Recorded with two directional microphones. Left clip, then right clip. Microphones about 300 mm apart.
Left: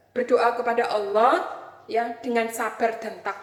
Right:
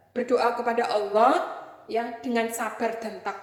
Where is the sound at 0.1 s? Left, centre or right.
Right.